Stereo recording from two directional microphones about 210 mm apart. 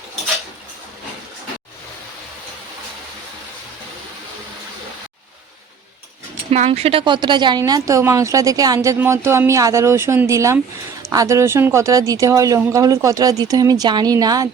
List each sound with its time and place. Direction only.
6.5 s speech: 30° right (ahead or behind)